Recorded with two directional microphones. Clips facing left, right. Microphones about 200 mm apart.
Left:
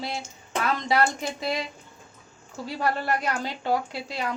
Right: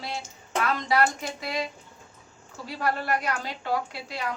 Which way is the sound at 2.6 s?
25° left (ahead or behind).